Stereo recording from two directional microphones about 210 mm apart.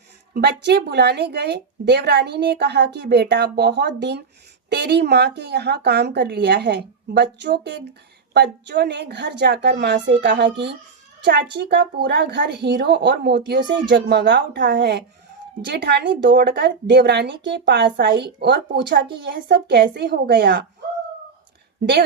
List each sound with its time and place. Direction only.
0.3 s speech: 50° right (ahead or behind)